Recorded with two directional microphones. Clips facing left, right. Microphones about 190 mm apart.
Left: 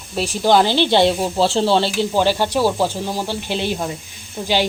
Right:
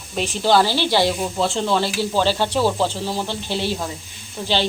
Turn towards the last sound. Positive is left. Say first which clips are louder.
# left 2 dB
turn(degrees=10)  # may be behind; listen again after turning